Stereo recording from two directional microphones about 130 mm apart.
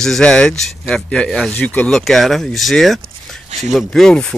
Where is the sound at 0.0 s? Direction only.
5° left (ahead or behind).